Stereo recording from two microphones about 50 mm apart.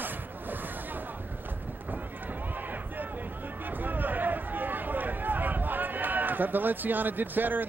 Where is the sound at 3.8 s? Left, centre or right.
Right.